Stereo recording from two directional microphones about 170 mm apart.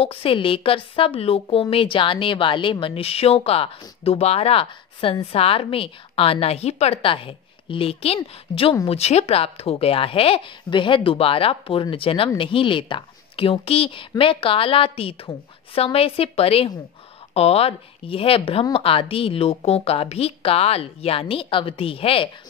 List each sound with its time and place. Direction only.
0.0 s a woman's voice: 35° left (ahead or behind)